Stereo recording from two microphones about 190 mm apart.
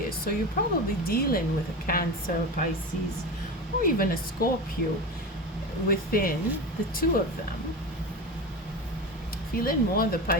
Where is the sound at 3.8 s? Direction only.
50° left (ahead or behind).